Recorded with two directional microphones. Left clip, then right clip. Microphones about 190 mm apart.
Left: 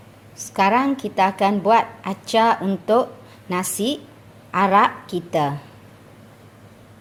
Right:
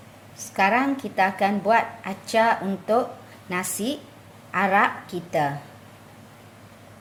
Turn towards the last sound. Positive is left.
turn(degrees=35)  # may be behind; listen again after turning